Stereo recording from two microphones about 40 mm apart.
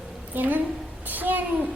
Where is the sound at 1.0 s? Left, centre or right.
Right.